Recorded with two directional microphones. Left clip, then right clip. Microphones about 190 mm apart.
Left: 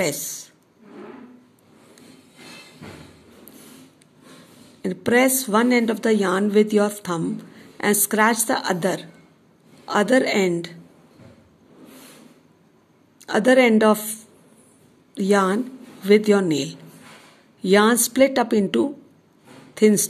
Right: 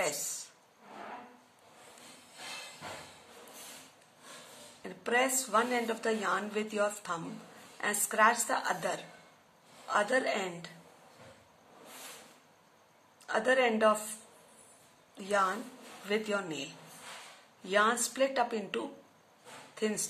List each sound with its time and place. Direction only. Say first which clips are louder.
4.8 s a woman's voice: left 12 dB; 50° left (ahead or behind)
13.3 s a woman's voice: left 12 dB; 50° left (ahead or behind)
15.1 s a woman's voice: left 11 dB; 50° left (ahead or behind)
17.6 s a woman's voice: left 11 dB; 50° left (ahead or behind)